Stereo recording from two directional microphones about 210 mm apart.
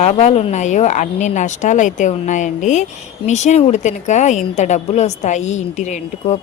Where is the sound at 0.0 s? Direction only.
30° left (ahead or behind).